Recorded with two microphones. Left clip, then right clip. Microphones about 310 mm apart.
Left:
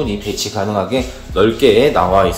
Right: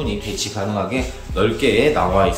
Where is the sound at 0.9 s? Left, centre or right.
Left.